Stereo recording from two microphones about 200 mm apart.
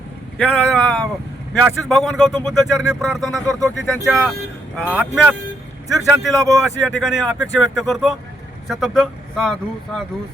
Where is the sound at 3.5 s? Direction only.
15° right (ahead or behind).